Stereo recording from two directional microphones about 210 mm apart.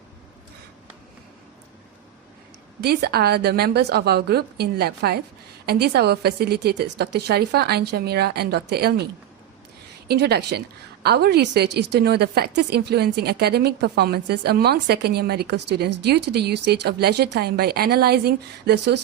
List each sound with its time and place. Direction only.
2.8 s a woman's voice: 50° right (ahead or behind)
10.1 s a woman's voice: 50° right (ahead or behind)